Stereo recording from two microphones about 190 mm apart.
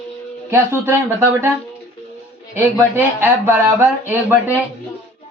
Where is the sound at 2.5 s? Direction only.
10° right (ahead or behind).